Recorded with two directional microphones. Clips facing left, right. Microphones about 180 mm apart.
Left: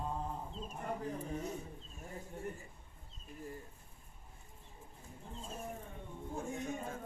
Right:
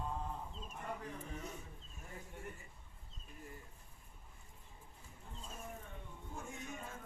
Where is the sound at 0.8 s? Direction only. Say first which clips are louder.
Left 6 dB; 35° left (ahead or behind).